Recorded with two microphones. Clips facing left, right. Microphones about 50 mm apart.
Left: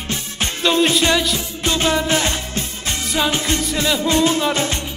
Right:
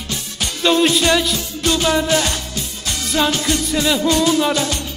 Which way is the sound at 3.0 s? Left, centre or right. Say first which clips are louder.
Right 2 dB; centre.